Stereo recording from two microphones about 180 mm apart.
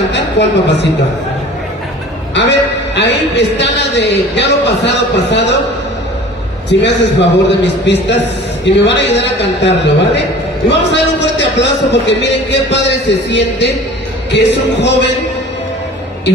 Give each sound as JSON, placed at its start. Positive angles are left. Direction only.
{"t": 0.1, "sound": "a woman's voice", "side_deg": 75}
{"t": 2.3, "sound": "a man's voice", "side_deg": 75}
{"t": 6.8, "sound": "a man's voice", "side_deg": 80}